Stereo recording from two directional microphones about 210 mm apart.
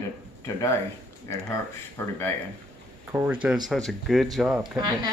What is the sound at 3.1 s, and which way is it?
Speech, 5° right (ahead or behind).